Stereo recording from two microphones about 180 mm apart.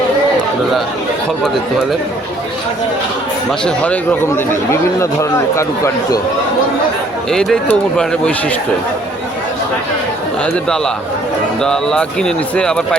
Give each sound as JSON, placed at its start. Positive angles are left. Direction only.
{"t": 3.6, "sound": "speech", "side_deg": 5}
{"t": 7.3, "sound": "speech", "side_deg": 5}
{"t": 10.4, "sound": "speech", "side_deg": 5}